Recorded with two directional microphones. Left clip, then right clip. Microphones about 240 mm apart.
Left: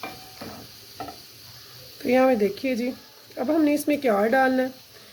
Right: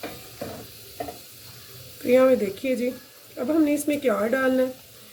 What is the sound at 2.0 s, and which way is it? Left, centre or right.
Speech, left.